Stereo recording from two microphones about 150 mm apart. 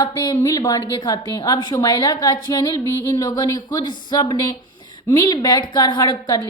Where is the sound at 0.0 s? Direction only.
30° left (ahead or behind).